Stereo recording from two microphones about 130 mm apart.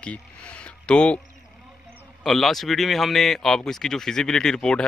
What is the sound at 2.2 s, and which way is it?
Speech, centre (ahead or behind).